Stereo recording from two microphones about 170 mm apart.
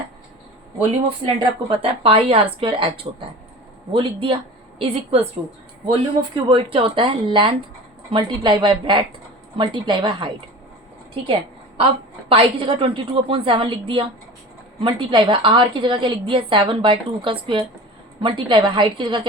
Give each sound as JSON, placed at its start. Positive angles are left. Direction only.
{"t": 1.2, "sound": "a woman's voice", "side_deg": -30}
{"t": 12.3, "sound": "a woman's voice", "side_deg": -35}